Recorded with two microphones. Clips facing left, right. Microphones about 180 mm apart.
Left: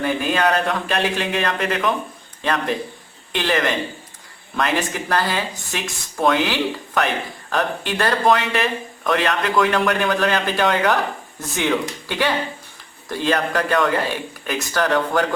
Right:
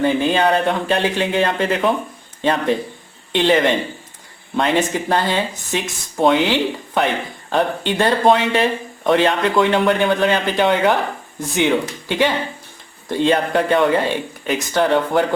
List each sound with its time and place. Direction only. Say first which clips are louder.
0.0 s speech: right 4 dB; 25° right (ahead or behind)